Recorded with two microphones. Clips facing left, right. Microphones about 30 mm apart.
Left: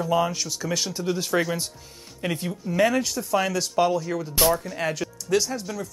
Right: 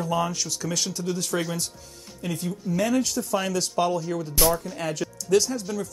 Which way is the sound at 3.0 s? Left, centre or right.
Centre.